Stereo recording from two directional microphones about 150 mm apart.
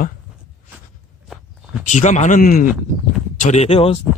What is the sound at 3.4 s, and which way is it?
Speech, 50° left (ahead or behind).